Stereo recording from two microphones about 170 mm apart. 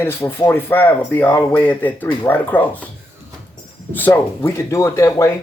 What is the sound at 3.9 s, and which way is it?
Speech, 10° left (ahead or behind).